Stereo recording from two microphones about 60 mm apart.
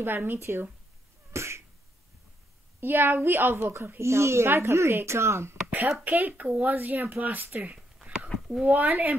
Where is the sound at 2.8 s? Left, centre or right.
Right.